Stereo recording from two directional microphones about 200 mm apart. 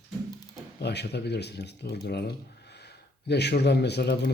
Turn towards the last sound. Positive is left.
turn(degrees=55)  # may be behind; listen again after turning